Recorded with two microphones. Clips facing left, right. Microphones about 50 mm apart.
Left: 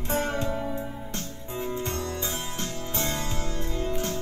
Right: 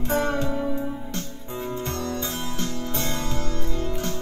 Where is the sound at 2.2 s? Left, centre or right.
Centre.